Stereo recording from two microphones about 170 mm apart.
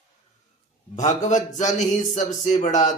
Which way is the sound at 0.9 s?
45° left (ahead or behind).